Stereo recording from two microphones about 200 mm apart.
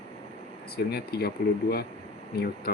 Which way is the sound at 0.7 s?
50° left (ahead or behind).